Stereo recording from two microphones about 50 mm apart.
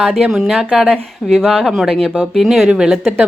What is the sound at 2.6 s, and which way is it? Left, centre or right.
Speech, centre.